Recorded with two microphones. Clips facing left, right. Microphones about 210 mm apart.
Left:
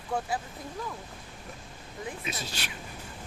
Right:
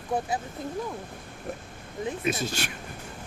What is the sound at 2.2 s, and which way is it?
Speech, 50° right (ahead or behind).